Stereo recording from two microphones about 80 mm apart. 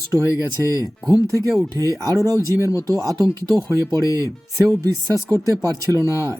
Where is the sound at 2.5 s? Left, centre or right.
Left.